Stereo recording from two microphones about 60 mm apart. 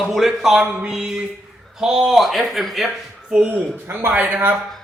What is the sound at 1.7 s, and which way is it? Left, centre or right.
Speech, centre.